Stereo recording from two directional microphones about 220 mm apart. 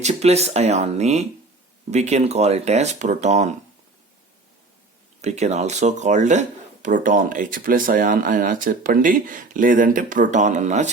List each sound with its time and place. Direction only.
0.0 s speech: 30° right (ahead or behind)
5.2 s speech: 30° right (ahead or behind)